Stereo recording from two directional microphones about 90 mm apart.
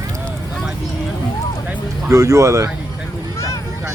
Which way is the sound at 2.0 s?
35° right (ahead or behind).